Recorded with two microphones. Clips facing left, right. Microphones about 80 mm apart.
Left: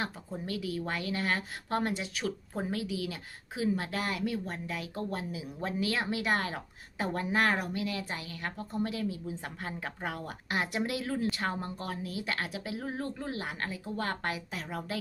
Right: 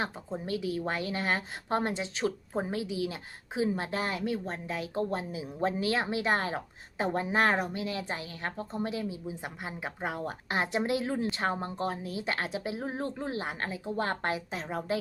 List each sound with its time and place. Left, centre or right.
0.0 s a woman's voice: right